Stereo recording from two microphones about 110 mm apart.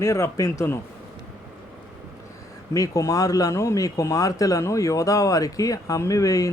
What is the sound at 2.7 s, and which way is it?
Speech, 30° left (ahead or behind).